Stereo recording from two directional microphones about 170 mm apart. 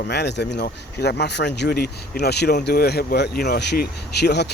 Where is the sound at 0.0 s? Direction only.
75° left (ahead or behind).